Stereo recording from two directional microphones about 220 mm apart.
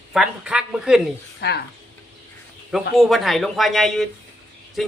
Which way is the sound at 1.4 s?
45° left (ahead or behind).